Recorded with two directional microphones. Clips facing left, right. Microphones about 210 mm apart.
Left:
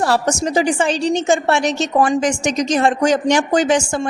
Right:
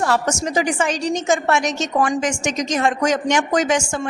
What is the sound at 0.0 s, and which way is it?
A woman's voice, 35° left (ahead or behind).